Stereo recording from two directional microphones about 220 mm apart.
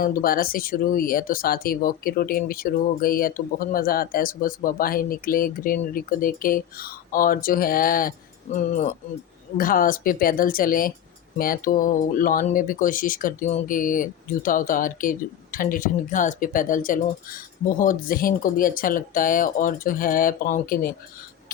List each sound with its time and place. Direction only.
0.0 s speech: 40° left (ahead or behind)